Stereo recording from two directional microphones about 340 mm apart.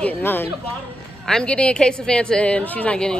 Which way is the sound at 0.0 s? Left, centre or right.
Centre.